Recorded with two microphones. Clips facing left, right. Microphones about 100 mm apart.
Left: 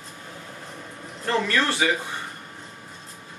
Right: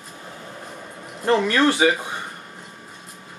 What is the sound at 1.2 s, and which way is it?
Speech, 20° right (ahead or behind).